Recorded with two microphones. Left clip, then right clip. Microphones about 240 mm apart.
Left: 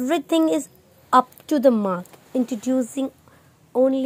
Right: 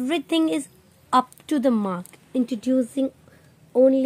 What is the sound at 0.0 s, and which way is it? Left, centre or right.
A woman's voice, centre.